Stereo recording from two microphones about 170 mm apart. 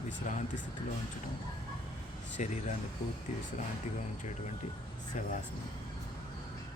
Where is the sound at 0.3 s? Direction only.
45° left (ahead or behind).